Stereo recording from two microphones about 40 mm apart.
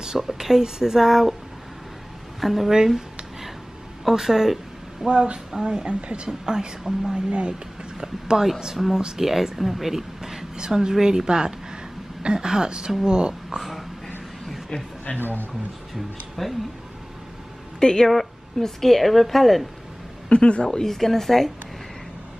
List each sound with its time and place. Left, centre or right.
0.2 s a woman's voice: centre
2.4 s speech: centre
4.0 s a woman's voice: centre
5.0 s a woman's voice: right
7.2 s a woman's voice: right
13.6 s a sound: centre
15.1 s speech: left
15.9 s speech: centre
17.7 s speech: centre
18.1 s a woman's voice: centre
20.2 s a woman's voice: left
20.6 s speech: centre